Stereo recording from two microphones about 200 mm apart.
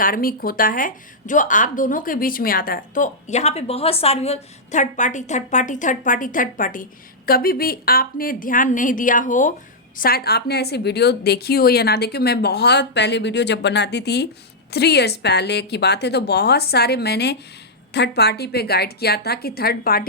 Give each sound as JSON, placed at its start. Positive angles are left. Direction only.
{"t": 0.0, "sound": "a woman's voice", "side_deg": 45}